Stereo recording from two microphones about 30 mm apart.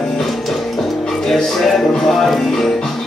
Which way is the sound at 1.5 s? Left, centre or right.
Centre.